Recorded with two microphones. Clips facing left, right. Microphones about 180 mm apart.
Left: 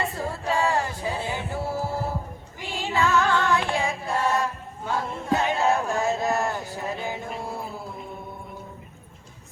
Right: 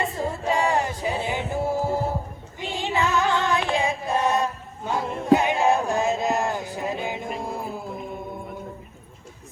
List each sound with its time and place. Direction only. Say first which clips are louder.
0.0 s a capella: right 2 dB; 20° right (ahead or behind)
2.6 s music: right 1 dB; 20° right (ahead or behind)
4.9 s a sound: right 6 dB; 15° right (ahead or behind)